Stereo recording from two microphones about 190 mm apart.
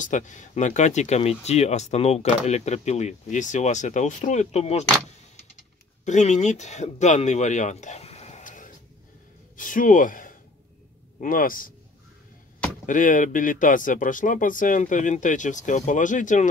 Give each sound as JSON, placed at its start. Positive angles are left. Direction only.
{"t": 0.0, "sound": "speech", "side_deg": 40}
{"t": 6.0, "sound": "speech", "side_deg": 40}
{"t": 12.8, "sound": "speech", "side_deg": 45}